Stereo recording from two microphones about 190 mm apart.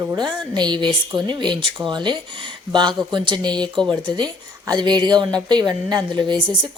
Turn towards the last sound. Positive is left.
turn(degrees=-25)  # may be behind; listen again after turning